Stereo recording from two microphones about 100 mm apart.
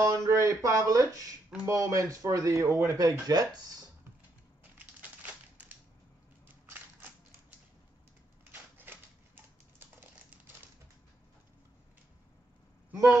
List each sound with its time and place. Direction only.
0.0 s speech: 30° right (ahead or behind)
4.7 s crushing: 15° right (ahead or behind)
8.5 s typewriter: 20° right (ahead or behind)
9.8 s a sound: 20° right (ahead or behind)